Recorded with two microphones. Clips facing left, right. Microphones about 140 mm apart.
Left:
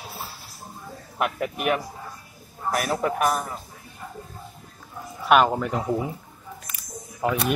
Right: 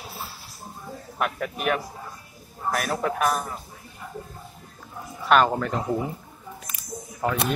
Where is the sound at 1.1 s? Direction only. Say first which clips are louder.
Left 2 dB; 5° left (ahead or behind).